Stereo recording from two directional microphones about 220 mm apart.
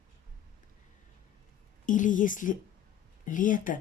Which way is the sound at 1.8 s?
35° left (ahead or behind).